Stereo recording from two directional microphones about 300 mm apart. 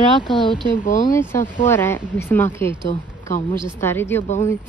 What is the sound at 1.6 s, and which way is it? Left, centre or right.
Speech, centre.